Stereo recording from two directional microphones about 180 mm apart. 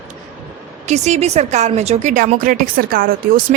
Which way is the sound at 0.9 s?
40° right (ahead or behind).